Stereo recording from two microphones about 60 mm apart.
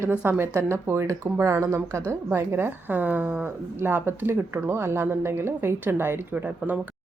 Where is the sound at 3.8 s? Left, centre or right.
Right.